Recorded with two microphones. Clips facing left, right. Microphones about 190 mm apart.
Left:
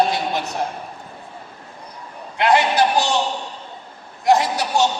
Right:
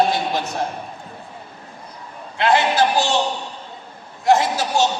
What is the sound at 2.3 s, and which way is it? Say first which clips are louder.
Speech: even; 20° left (ahead or behind).